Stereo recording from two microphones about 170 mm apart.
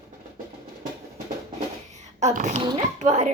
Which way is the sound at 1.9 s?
45° right (ahead or behind).